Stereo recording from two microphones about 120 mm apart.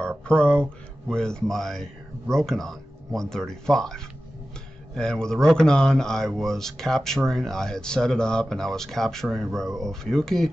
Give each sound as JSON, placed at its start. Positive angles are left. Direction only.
{"t": 0.3, "sound": "speech", "side_deg": 10}